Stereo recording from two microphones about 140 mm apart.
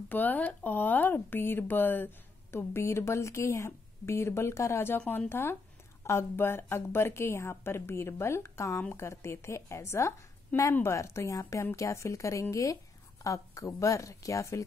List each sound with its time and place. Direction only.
0.1 s a woman's voice: 10° left (ahead or behind)